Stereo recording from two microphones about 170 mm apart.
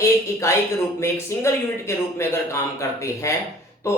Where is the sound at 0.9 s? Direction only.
15° left (ahead or behind).